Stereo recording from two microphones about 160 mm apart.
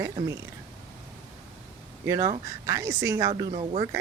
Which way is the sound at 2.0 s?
20° right (ahead or behind).